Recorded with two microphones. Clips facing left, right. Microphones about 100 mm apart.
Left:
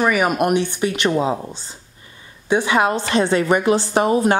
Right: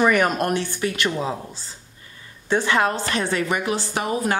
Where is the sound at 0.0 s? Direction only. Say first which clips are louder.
Left 1 dB; 5° left (ahead or behind).